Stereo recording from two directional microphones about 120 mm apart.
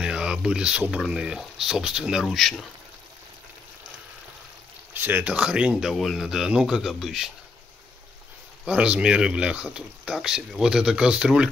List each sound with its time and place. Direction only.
0.0 s speech: 5° right (ahead or behind)
4.9 s speech: 15° right (ahead or behind)
8.6 s speech: 10° right (ahead or behind)